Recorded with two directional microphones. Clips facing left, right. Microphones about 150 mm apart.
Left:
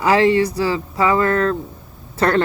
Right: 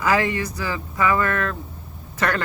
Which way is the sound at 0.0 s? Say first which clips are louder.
Left 7 dB; 30° left (ahead or behind).